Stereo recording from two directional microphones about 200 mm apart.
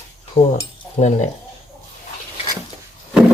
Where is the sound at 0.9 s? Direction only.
35° left (ahead or behind).